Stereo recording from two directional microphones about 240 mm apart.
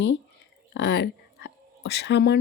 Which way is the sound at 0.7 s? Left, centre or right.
Left.